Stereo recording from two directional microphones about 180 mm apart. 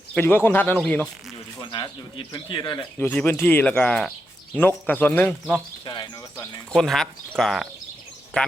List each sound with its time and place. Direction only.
0.1 s speech: 10° left (ahead or behind)
1.7 s speech: 25° left (ahead or behind)
3.0 s speech: 10° left (ahead or behind)
5.8 s speech: 25° left (ahead or behind)
6.7 s speech: centre (ahead or behind)